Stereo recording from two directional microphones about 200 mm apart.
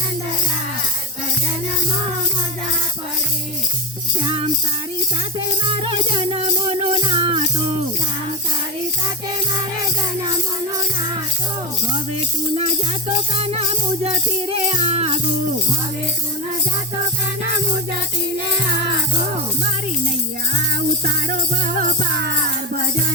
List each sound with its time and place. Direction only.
5.6 s music: 25° right (ahead or behind)
13.3 s music: 30° right (ahead or behind)